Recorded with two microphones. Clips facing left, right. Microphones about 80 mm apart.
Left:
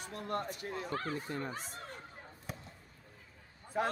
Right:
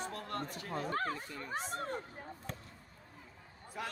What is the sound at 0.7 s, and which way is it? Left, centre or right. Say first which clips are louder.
Speech: right 3 dB; right.